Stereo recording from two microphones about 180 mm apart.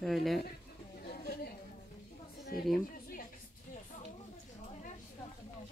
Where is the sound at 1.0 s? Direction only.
55° left (ahead or behind).